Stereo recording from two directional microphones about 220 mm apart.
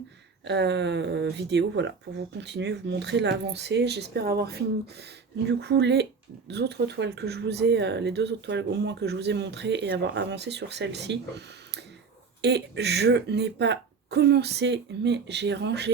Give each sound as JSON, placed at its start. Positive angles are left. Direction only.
{"t": 0.4, "sound": "speech", "side_deg": -50}